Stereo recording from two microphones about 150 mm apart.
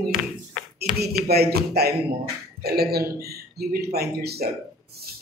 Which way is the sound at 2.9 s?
90° right.